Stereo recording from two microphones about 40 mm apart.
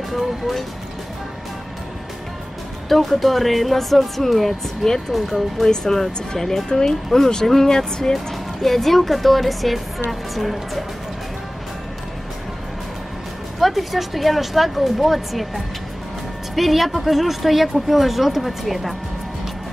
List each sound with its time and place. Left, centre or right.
0.1 s a woman's voice: centre
2.9 s a woman's voice: centre
5.7 s a woman's voice: centre
13.6 s a woman's voice: centre